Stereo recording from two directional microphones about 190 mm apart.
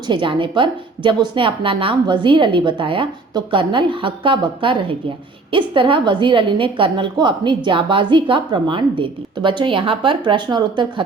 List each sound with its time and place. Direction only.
0.1 s a woman's voice: 25° right (ahead or behind)